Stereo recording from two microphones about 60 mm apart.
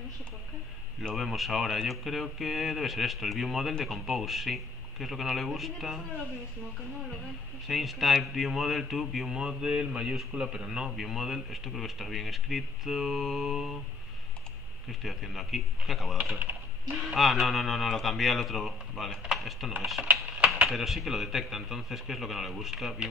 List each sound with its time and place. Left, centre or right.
1.1 s speech: centre
7.6 s speech: centre
14.9 s speech: centre
16.3 s typing: right
16.9 s speech: centre